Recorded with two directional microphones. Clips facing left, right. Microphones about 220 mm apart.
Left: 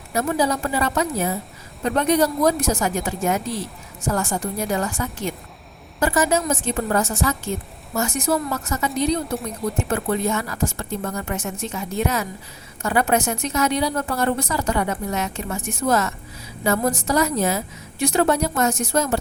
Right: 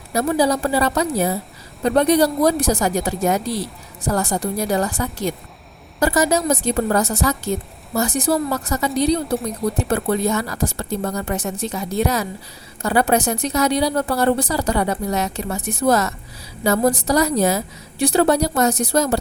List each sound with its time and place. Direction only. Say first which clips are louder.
0.1 s speech: right 3 dB; 35° right (ahead or behind)